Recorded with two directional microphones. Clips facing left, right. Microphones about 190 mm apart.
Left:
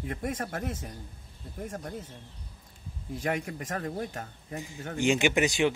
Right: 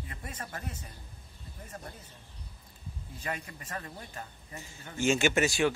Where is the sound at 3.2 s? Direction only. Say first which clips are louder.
Left 7 dB; 75° left (ahead or behind); by 4.6 s 55° left (ahead or behind).